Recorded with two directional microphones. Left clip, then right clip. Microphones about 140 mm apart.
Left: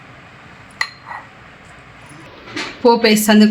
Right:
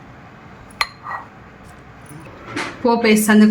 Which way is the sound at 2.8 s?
80° left.